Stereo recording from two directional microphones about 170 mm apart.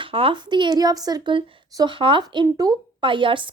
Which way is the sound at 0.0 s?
30° right (ahead or behind).